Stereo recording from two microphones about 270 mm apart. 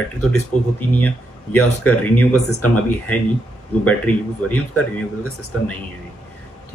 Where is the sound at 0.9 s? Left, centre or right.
Centre.